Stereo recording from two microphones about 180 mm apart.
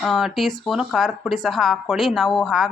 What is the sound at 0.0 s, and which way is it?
Speech, centre (ahead or behind).